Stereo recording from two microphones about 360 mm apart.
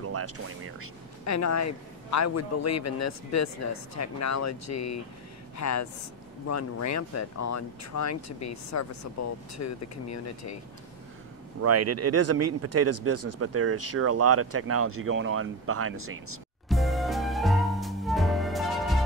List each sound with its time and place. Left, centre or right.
0.0 s music: right
1.2 s speech: left
11.6 s speech: right
16.6 s music: centre